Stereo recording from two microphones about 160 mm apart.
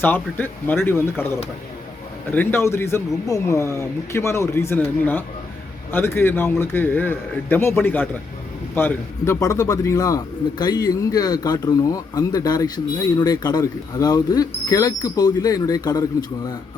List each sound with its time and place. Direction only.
0.0 s speech: 10° left (ahead or behind)
2.3 s speech: 15° left (ahead or behind)